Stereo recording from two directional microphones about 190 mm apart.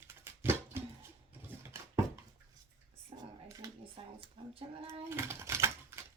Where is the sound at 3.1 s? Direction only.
30° right (ahead or behind).